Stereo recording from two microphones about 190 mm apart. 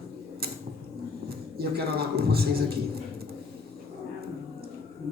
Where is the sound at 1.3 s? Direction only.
55° right (ahead or behind).